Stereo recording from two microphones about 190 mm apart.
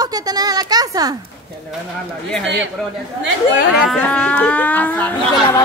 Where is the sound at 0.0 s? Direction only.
20° right (ahead or behind).